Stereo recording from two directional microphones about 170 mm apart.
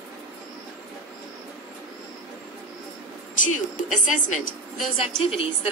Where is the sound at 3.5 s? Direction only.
50° left (ahead or behind).